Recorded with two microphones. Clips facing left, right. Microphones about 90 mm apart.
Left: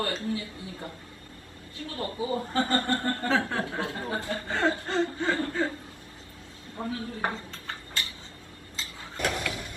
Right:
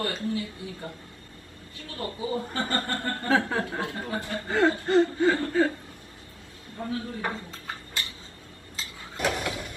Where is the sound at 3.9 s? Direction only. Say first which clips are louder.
Even; 30° left (ahead or behind).